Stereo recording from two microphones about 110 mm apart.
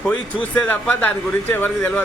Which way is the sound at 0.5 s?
15° left (ahead or behind).